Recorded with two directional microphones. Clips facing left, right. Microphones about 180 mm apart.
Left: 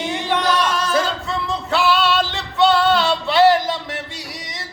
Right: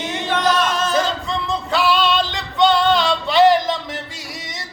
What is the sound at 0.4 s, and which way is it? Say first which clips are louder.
Singing: right 1 dB; 20° right (ahead or behind).